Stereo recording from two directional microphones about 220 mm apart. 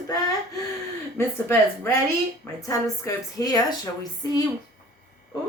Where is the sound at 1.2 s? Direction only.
10° left (ahead or behind).